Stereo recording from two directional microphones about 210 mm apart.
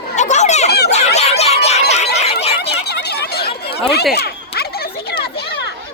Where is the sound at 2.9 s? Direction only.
50° left (ahead or behind).